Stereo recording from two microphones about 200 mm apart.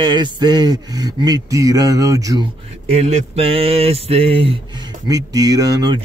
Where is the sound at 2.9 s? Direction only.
30° right (ahead or behind).